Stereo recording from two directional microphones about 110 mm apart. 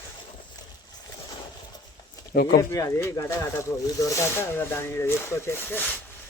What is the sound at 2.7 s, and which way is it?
Speech, 25° left (ahead or behind).